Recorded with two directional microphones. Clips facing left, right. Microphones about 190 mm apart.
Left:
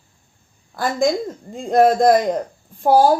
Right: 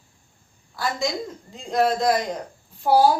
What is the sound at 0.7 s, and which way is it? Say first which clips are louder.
A woman's voice: left 7 dB; 50° left (ahead or behind).